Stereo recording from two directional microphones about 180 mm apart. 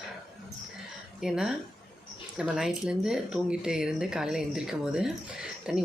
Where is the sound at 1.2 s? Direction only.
5° right (ahead or behind).